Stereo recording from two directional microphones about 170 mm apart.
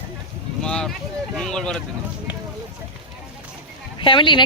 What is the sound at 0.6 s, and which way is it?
Speech, 5° left (ahead or behind).